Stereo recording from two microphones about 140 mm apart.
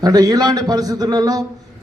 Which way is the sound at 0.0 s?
30° right (ahead or behind).